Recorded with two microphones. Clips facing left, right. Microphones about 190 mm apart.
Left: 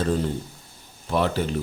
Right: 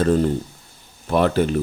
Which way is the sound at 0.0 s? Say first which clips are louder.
Right 6 dB; 55° right (ahead or behind).